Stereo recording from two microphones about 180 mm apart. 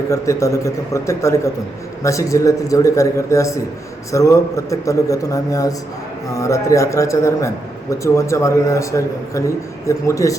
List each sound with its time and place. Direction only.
0.1 s a man's voice: 15° left (ahead or behind)